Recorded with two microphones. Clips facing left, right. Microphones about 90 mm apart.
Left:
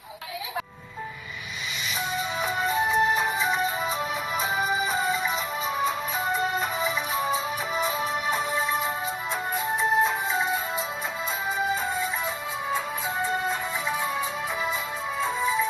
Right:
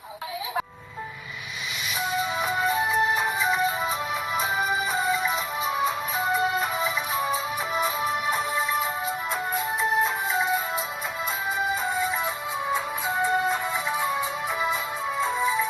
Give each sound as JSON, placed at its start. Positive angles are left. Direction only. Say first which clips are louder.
{"t": 2.0, "sound": "music", "louder": "right 3 dB", "side_deg": 0}
{"t": 10.0, "sound": "music", "louder": "even", "side_deg": 0}
{"t": 12.7, "sound": "music", "louder": "right 1 dB", "side_deg": -15}